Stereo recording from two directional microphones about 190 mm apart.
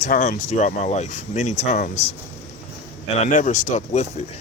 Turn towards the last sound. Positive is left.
turn(degrees=40)  # may be behind; listen again after turning